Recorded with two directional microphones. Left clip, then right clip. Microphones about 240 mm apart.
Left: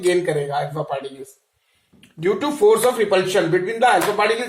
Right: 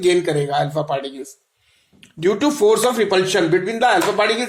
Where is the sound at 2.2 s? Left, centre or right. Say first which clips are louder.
Right 1 dB; right.